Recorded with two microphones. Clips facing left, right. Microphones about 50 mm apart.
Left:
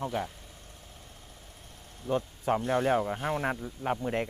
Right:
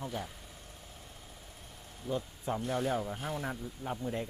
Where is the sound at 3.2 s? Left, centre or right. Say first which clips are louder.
Left 7 dB; left.